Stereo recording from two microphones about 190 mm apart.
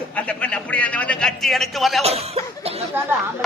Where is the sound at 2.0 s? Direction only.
35° right (ahead or behind).